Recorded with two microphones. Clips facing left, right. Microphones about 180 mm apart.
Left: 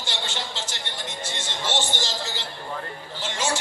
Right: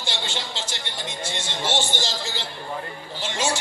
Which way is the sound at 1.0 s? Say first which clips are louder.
Right 3 dB; 10° right (ahead or behind).